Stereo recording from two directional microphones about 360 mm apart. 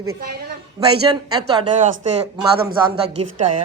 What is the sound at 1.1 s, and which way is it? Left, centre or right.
Speech, centre.